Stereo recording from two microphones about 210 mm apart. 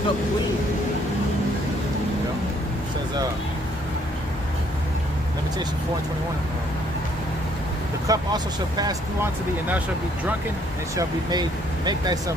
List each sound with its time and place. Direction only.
8.0 s speech: 15° right (ahead or behind)
10.9 s speech: 20° right (ahead or behind)